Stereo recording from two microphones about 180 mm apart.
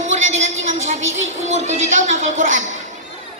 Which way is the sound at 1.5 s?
40° right (ahead or behind).